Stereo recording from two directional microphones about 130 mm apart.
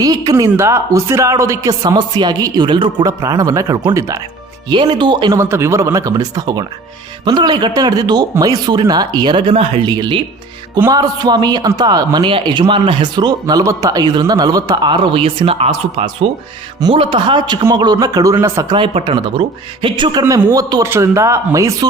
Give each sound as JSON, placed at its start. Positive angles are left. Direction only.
{"t": 0.0, "sound": "speech", "side_deg": -30}
{"t": 3.1, "sound": "speech", "side_deg": -25}
{"t": 4.7, "sound": "a man's voice", "side_deg": -35}
{"t": 5.4, "sound": "a man's voice", "side_deg": -20}
{"t": 9.9, "sound": "a man's voice", "side_deg": -30}
{"t": 16.8, "sound": "a man's voice", "side_deg": -40}
{"t": 18.8, "sound": "speech", "side_deg": -40}